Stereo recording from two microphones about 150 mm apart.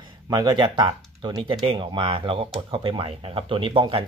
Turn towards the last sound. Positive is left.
turn(degrees=-35)  # may be behind; listen again after turning